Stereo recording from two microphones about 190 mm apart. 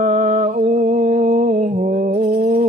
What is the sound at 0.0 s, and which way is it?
Mantra, 40° right (ahead or behind).